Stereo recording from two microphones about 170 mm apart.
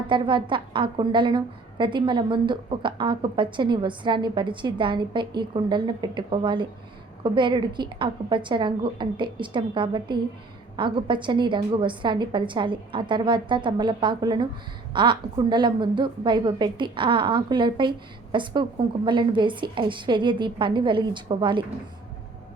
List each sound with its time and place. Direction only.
0.1 s a woman's voice: 30° right (ahead or behind)